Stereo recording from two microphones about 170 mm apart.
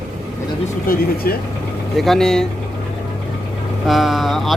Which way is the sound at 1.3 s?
60° left (ahead or behind).